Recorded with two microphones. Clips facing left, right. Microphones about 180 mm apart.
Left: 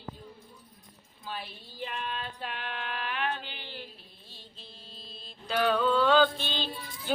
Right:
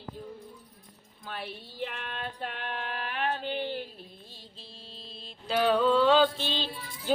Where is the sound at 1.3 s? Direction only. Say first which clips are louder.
Right 1 dB; 60° right (ahead or behind).